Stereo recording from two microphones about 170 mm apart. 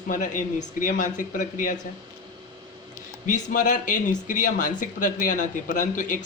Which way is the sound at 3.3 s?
50° left (ahead or behind).